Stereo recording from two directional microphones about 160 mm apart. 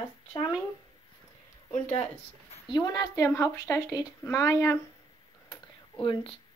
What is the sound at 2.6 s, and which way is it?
Speech, 25° left (ahead or behind).